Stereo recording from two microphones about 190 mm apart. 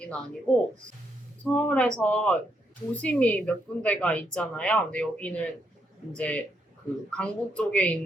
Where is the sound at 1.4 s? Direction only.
5° left (ahead or behind).